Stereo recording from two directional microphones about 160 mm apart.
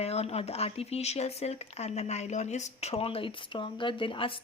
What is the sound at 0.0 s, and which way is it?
Speech, 40° left (ahead or behind).